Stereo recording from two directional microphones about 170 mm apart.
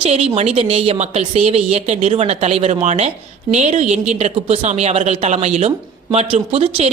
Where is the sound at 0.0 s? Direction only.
35° right (ahead or behind).